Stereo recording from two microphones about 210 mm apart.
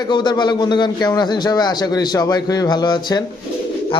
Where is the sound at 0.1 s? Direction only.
20° left (ahead or behind).